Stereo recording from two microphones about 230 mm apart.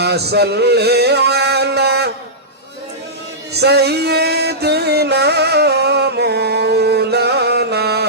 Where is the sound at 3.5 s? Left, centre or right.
Right.